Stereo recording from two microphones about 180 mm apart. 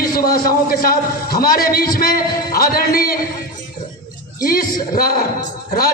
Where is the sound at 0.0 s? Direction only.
55° left (ahead or behind).